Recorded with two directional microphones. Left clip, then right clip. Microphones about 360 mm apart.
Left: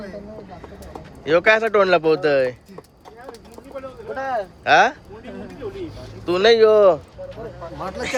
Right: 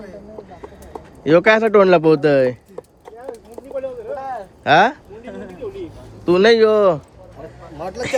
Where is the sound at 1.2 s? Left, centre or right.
Centre.